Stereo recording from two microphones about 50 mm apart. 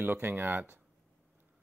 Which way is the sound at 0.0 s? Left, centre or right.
Right.